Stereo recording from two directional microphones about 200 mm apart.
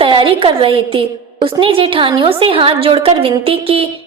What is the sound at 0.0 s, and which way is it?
A woman's voice, 25° right (ahead or behind).